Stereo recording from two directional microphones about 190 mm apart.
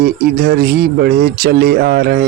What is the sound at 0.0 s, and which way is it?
Speech, 50° right (ahead or behind).